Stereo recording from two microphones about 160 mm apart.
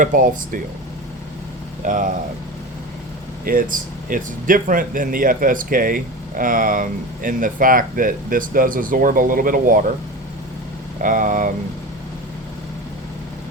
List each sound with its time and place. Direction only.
0.0 s speech: 55° right (ahead or behind)
1.8 s speech: 55° right (ahead or behind)
3.4 s speech: 60° right (ahead or behind)
11.0 s speech: 55° right (ahead or behind)